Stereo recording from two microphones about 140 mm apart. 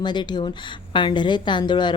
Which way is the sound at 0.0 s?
30° left (ahead or behind).